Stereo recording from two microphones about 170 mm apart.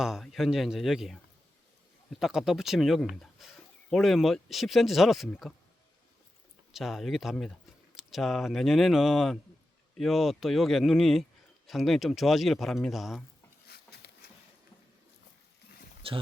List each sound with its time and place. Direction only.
0.0 s a man's voice: centre (ahead or behind)
6.7 s a man's voice: centre (ahead or behind)
13.7 s a sound: 70° left (ahead or behind)
16.0 s speech: 35° right (ahead or behind)